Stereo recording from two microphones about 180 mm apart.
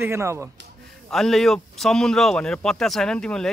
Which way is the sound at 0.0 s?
15° right (ahead or behind).